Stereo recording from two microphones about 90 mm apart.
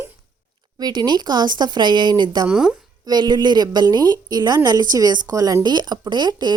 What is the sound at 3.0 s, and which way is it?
Speech, 55° right (ahead or behind).